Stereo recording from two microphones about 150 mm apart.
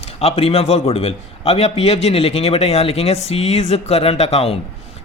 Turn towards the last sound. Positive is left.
turn(degrees=40)  # may be behind; listen again after turning